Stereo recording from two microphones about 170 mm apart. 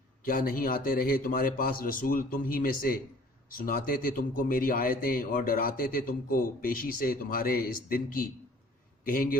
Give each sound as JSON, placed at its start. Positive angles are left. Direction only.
{"t": 0.2, "sound": "a man's voice", "side_deg": 55}